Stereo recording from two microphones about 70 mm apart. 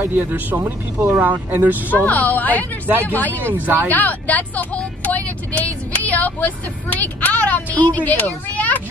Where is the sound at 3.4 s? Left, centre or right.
Right.